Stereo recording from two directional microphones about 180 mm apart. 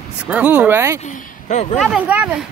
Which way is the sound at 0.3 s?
10° right (ahead or behind).